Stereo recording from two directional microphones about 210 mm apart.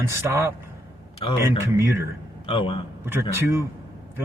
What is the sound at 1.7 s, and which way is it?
Speech, 10° right (ahead or behind).